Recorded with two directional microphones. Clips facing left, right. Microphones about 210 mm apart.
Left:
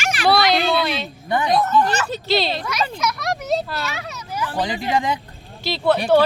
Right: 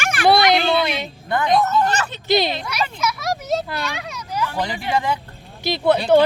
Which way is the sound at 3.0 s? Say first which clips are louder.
Even; 5° right (ahead or behind).